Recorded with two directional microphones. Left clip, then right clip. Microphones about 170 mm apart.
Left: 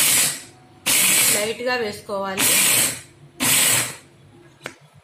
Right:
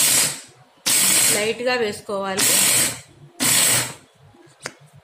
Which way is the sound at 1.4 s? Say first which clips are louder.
Right 2 dB; 20° right (ahead or behind).